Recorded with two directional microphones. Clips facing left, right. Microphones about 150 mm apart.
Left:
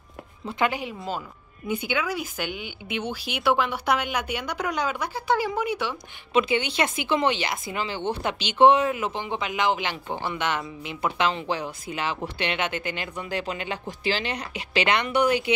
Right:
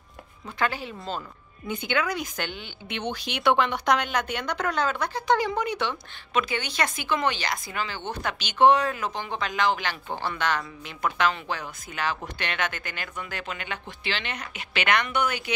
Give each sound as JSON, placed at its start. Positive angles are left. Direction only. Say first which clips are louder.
{"t": 0.5, "sound": "speech", "louder": "left 3 dB", "side_deg": 20}
{"t": 6.3, "sound": "speech", "louder": "left 5 dB", "side_deg": 25}